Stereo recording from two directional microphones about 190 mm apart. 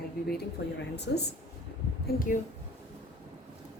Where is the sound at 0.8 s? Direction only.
60° left (ahead or behind).